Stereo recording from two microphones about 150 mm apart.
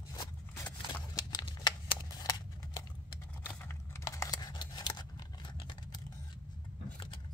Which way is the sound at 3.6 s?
20° left (ahead or behind).